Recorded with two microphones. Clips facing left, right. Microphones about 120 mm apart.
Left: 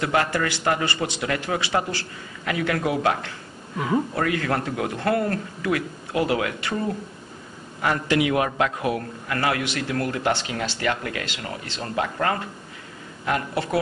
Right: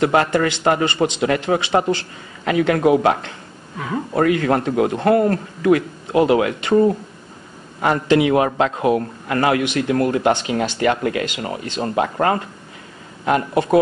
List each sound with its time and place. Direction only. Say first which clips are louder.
0.0 s speech: right 6 dB; 25° right (ahead or behind)
7.8 s speech: right 6 dB; 25° right (ahead or behind)